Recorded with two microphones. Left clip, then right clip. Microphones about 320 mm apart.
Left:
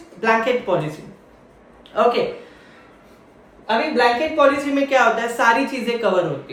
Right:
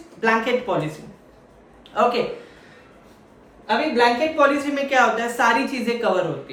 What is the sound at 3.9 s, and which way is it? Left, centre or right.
A woman's voice, centre.